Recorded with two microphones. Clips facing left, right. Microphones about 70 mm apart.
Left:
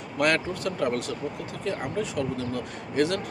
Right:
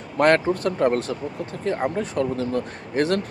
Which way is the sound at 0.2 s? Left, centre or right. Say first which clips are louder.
Right 7 dB; right.